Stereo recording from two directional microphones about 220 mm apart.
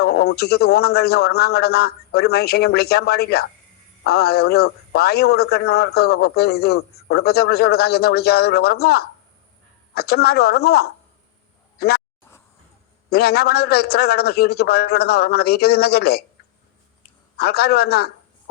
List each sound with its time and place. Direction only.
0.0 s a man's voice: 50° left (ahead or behind)
13.1 s a man's voice: 45° left (ahead or behind)
17.3 s a man's voice: 45° left (ahead or behind)